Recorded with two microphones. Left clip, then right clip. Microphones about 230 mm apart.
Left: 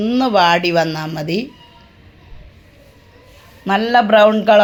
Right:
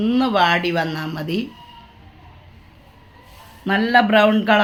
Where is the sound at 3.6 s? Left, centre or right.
Centre.